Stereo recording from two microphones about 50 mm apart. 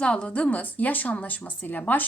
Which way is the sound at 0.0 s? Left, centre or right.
Left.